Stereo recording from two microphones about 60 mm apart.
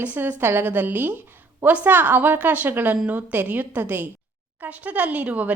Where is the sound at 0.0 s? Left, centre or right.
Right.